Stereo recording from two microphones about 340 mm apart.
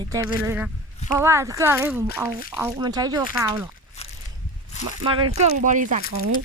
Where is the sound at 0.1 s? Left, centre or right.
Centre.